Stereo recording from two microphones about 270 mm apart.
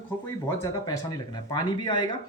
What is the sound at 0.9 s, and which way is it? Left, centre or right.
Speech, centre.